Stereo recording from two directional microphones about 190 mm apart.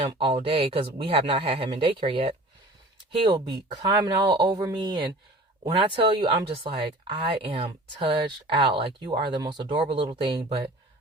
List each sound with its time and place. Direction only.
0.0 s speech: 30° right (ahead or behind)